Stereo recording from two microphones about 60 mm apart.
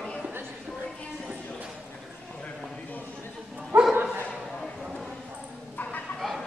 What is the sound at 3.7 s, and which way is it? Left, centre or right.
Dog, right.